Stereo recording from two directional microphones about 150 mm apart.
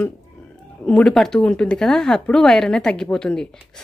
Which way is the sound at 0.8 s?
5° left (ahead or behind).